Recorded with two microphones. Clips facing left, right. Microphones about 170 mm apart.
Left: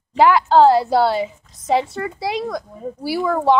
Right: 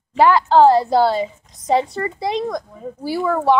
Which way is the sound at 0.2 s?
10° left (ahead or behind).